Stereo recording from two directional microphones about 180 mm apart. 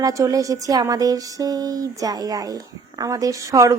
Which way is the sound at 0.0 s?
20° right (ahead or behind).